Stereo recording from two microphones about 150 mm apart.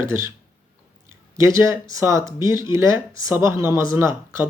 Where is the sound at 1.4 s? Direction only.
20° right (ahead or behind).